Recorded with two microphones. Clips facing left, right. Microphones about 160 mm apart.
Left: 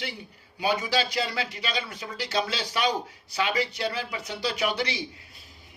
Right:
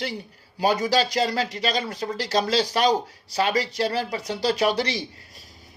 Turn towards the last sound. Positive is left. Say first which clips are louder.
# right 5 dB
turn(degrees=-40)  # may be behind; listen again after turning